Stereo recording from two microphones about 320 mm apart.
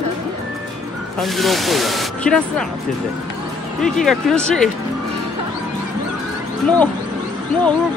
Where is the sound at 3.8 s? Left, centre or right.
Centre.